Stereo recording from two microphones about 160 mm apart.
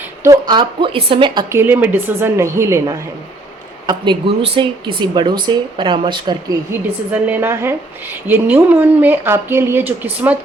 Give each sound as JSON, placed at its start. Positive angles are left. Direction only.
{"t": 0.2, "sound": "speech", "side_deg": -25}
{"t": 1.5, "sound": "speech", "side_deg": -15}
{"t": 3.8, "sound": "speech", "side_deg": -30}
{"t": 6.7, "sound": "speech", "side_deg": -10}